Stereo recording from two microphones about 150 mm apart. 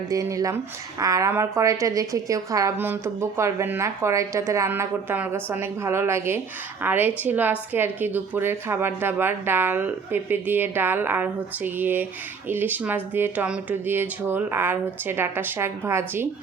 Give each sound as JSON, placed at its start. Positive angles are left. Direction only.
{"t": 0.1, "sound": "a woman's voice", "side_deg": -20}